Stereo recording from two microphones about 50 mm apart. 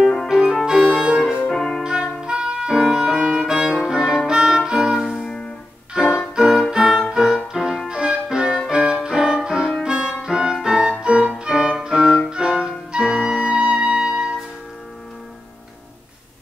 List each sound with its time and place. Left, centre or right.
0.3 s music: centre
1.4 s music: centre
1.8 s music: centre
3.6 s music: centre
5.1 s music: centre
5.9 s music: centre
7.9 s music: centre